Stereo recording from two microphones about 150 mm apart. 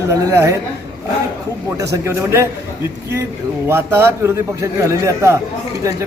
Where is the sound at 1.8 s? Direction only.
20° right (ahead or behind).